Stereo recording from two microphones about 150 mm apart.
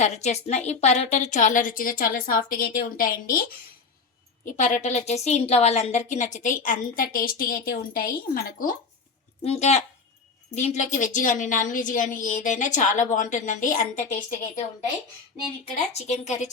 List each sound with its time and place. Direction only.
0.0 s a woman's voice: 50° left (ahead or behind); by 3.4 s 75° left (ahead or behind)
4.4 s a woman's voice: 60° left (ahead or behind)
9.4 s a woman's voice: 45° left (ahead or behind); by 14.6 s 65° left (ahead or behind)
15.7 s a woman's voice: 50° left (ahead or behind)